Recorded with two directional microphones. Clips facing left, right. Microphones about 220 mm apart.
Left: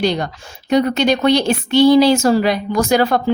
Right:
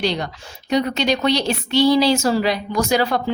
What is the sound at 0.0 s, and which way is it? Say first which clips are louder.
A woman's voice: left 4 dB; 50° left (ahead or behind).